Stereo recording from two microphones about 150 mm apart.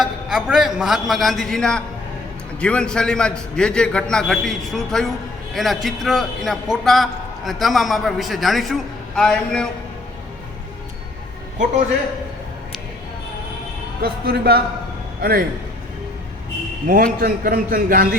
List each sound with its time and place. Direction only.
0.0 s a man's voice: 5° right (ahead or behind)
14.0 s a man's voice: 90° right
16.8 s a man's voice: 70° right (ahead or behind)